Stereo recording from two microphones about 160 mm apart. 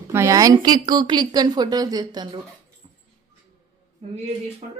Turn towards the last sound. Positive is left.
turn(degrees=-45)  # may be behind; listen again after turning